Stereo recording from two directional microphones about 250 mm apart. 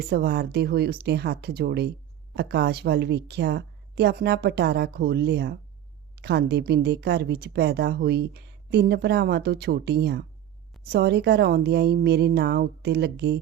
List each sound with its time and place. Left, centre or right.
0.1 s speech: right